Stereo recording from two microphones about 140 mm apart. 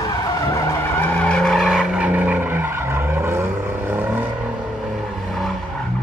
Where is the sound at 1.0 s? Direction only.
10° left (ahead or behind); by 2.7 s 15° right (ahead or behind).